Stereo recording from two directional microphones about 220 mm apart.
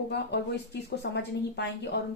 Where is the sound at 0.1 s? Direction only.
50° left (ahead or behind).